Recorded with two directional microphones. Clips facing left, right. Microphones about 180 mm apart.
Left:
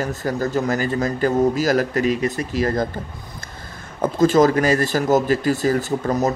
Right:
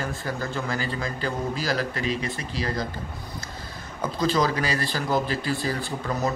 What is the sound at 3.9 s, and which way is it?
Speech, 45° left (ahead or behind).